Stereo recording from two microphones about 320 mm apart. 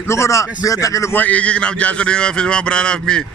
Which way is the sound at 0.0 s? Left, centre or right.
Centre.